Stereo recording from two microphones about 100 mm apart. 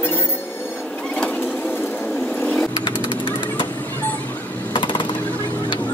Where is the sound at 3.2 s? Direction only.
55° left (ahead or behind).